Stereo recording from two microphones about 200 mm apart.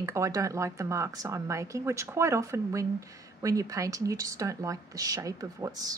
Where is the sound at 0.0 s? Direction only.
15° right (ahead or behind).